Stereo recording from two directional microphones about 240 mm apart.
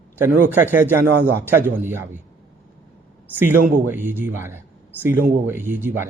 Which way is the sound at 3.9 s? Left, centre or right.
Centre.